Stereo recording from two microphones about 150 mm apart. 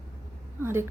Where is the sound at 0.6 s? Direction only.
15° right (ahead or behind).